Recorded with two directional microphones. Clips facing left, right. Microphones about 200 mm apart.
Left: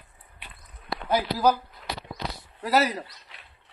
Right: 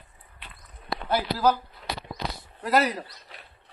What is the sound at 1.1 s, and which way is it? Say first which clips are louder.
Speech: left 1 dB; 10° left (ahead or behind).